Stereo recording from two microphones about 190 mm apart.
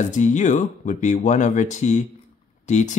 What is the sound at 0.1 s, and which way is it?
Speech, 40° left (ahead or behind).